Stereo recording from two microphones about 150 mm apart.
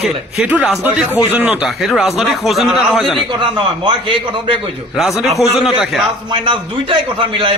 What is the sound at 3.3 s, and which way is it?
A man's voice, 35° right (ahead or behind).